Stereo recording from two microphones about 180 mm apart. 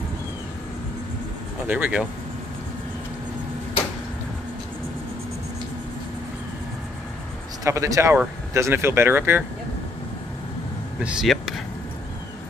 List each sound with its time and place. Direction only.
1.7 s speech: 5° right (ahead or behind)
7.6 s speech: 20° right (ahead or behind)
11.0 s a sound: 5° right (ahead or behind)